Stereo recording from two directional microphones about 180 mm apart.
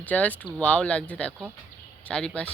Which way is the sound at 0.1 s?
10° left (ahead or behind).